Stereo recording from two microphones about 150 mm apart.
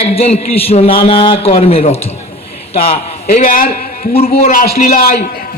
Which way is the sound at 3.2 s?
60° left (ahead or behind).